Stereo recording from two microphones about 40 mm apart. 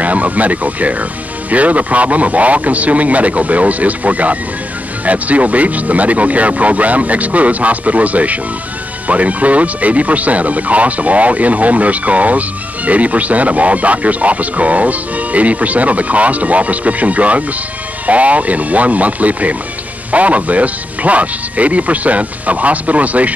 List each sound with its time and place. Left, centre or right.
0.0 s speech: right